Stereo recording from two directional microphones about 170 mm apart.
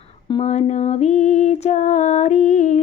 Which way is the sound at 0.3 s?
35° left (ahead or behind).